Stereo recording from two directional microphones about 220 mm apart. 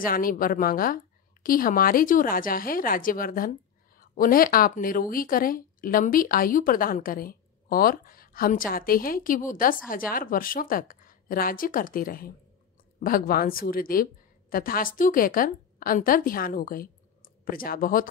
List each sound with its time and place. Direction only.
0.0 s a woman's voice: 40° left (ahead or behind)